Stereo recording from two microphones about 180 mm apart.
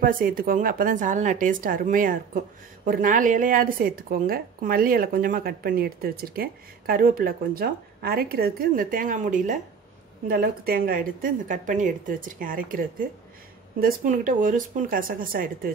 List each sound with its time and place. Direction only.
0.0 s a woman's voice: 50° right (ahead or behind)